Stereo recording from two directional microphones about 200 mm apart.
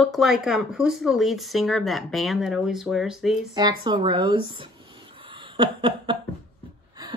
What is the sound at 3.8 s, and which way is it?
Speech, 20° right (ahead or behind).